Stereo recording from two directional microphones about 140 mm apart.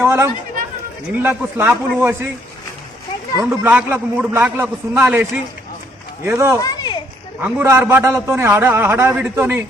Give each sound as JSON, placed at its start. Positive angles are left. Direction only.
{"t": 0.0, "sound": "chatter", "side_deg": -15}
{"t": 1.2, "sound": "a man's voice", "side_deg": -15}
{"t": 3.3, "sound": "a man's voice", "side_deg": -20}
{"t": 6.6, "sound": "a sound", "side_deg": 30}
{"t": 7.4, "sound": "a man's voice", "side_deg": -20}